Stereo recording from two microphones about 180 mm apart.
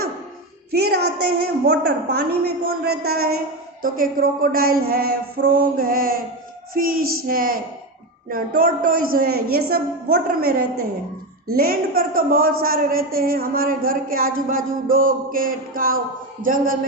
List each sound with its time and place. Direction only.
0.7 s a woman's voice: 60° right (ahead or behind)
16.4 s a man's voice: 90° right